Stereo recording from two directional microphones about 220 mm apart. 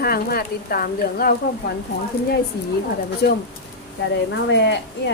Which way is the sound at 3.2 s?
45° left (ahead or behind).